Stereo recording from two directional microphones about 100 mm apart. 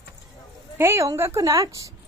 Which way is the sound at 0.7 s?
25° right (ahead or behind).